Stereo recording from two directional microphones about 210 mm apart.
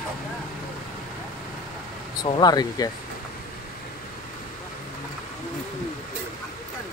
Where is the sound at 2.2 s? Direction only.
20° left (ahead or behind).